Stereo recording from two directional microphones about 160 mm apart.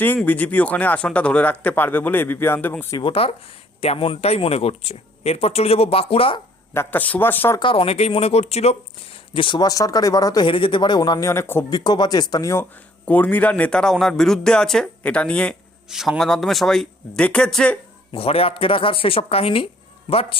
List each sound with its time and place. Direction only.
0.3 s speech: 10° left (ahead or behind)
3.0 s speech: 35° left (ahead or behind)
6.7 s speech: 10° left (ahead or behind)
7.6 s speech: 35° left (ahead or behind); by 11.6 s 15° left (ahead or behind)
11.7 s a man's voice: 25° left (ahead or behind); by 17.7 s 5° left (ahead or behind)
18.1 s speech: 35° left (ahead or behind)